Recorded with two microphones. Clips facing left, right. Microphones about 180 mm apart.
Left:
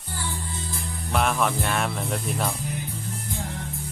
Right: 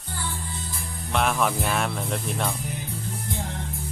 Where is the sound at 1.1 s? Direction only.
Centre (ahead or behind).